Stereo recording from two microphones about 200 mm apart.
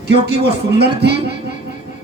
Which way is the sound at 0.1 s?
55° right (ahead or behind).